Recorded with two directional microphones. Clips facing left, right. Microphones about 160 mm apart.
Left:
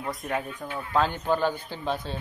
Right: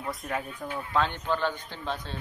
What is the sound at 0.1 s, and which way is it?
A man's voice, centre (ahead or behind).